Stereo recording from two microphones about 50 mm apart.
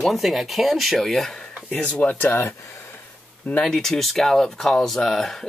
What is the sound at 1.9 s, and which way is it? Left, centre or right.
Speech, left.